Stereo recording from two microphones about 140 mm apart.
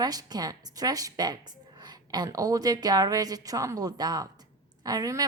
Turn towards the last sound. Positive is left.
turn(degrees=-25)  # may be behind; listen again after turning